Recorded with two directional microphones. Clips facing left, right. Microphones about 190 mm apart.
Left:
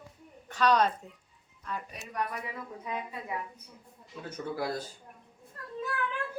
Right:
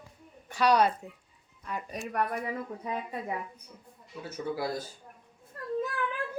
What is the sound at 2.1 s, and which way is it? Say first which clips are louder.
Speech: right 4 dB; 55° right (ahead or behind).